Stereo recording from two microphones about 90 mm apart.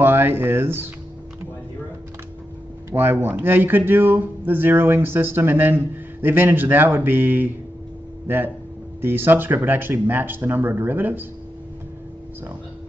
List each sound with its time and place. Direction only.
0.0 s speech: 25° right (ahead or behind)
2.9 s speech: 25° right (ahead or behind)
9.0 s speech: 25° right (ahead or behind)